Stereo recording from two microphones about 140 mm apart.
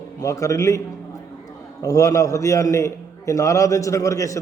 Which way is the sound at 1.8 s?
25° left (ahead or behind).